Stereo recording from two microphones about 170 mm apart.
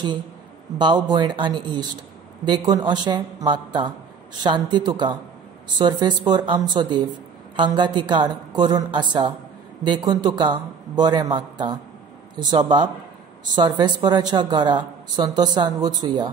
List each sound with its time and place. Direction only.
0.7 s speech: 25° right (ahead or behind)